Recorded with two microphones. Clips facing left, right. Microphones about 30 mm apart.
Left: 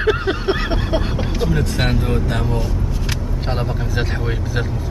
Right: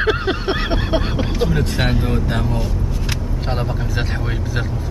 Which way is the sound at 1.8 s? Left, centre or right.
Centre.